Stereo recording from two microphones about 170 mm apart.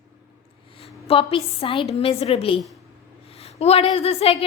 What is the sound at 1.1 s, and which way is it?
A woman's voice, 35° left (ahead or behind).